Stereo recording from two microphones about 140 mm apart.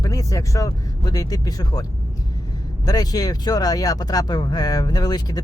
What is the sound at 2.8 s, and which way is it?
Speech, 25° left (ahead or behind).